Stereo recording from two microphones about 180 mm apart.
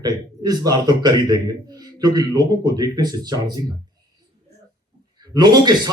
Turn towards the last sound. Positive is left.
turn(degrees=-20)  # may be behind; listen again after turning